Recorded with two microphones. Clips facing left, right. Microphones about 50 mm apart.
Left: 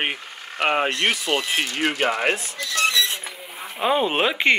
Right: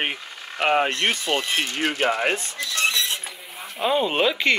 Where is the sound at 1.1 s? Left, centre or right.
Centre.